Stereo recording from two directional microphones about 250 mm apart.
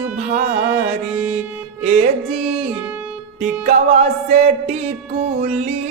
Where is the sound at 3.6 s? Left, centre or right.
Right.